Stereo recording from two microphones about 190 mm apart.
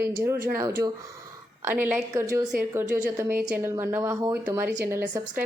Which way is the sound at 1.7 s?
10° right (ahead or behind).